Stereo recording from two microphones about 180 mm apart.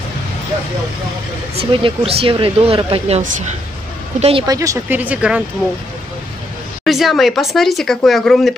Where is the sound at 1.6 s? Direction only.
35° right (ahead or behind).